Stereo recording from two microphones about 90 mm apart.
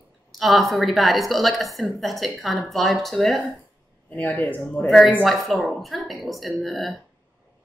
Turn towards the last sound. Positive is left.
turn(degrees=0)  # may be behind; listen again after turning